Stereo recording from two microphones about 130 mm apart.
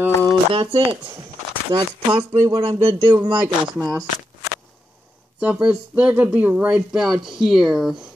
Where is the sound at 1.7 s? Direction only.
35° right (ahead or behind).